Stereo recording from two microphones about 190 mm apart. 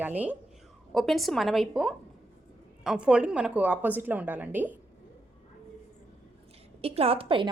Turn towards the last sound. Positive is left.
turn(degrees=-25)  # may be behind; listen again after turning